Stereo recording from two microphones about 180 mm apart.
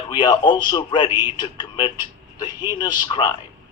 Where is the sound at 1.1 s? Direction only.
15° right (ahead or behind).